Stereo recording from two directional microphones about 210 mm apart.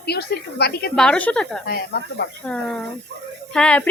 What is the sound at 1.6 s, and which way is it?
Speech, 50° left (ahead or behind).